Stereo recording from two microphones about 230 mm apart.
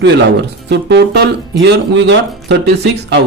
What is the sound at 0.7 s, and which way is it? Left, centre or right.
Speech, right.